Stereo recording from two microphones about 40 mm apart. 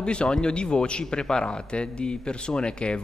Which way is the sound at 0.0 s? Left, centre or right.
Left.